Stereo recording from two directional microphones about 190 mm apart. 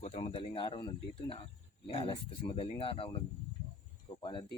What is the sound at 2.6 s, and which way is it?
Speech, 30° left (ahead or behind).